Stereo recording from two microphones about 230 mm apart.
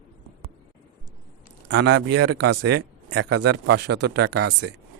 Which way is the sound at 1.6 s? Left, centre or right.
Right.